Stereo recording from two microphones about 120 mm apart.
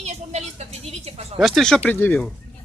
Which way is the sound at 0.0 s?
70° right (ahead or behind).